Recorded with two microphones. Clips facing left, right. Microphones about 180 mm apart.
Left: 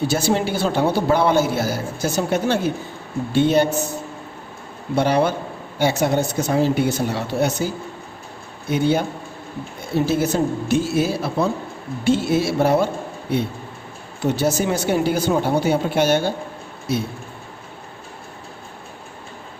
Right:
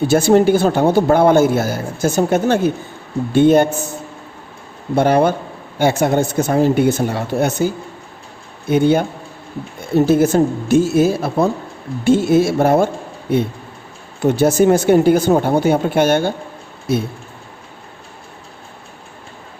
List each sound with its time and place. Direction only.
0.1 s a man's voice: 50° right (ahead or behind)
4.9 s a man's voice: 50° right (ahead or behind)
8.7 s a man's voice: 50° right (ahead or behind)
10.1 s a man's voice: 50° right (ahead or behind)
14.3 s a man's voice: 50° right (ahead or behind)